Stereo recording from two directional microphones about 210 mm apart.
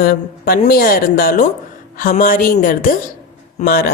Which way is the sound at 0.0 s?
45° left (ahead or behind).